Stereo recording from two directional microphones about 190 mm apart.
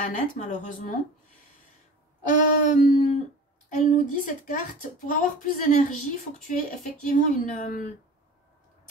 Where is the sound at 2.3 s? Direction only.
45° left (ahead or behind).